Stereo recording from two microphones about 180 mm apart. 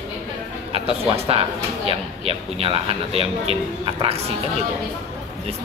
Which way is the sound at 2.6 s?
35° right (ahead or behind).